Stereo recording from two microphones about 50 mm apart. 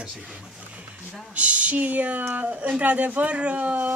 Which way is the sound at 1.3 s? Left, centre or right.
Right.